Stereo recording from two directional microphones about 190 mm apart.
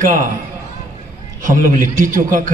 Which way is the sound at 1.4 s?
45° right (ahead or behind).